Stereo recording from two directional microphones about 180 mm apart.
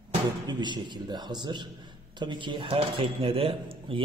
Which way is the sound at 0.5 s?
25° right (ahead or behind).